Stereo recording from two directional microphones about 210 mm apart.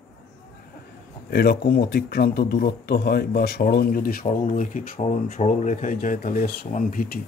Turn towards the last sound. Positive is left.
turn(degrees=45)  # may be behind; listen again after turning